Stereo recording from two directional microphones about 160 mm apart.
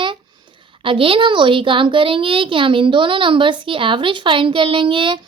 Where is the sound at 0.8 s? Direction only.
35° right (ahead or behind).